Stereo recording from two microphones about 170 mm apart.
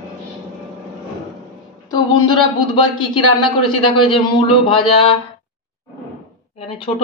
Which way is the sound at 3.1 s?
30° left (ahead or behind).